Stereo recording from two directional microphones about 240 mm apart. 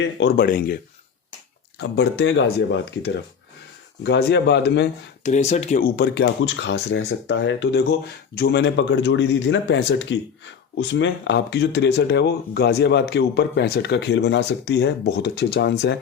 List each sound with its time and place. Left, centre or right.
0.0 s speech: left
1.8 s speech: left
4.0 s speech: left
5.2 s speech: left